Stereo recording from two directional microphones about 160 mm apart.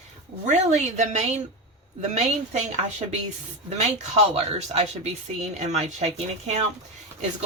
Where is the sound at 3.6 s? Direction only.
45° right (ahead or behind).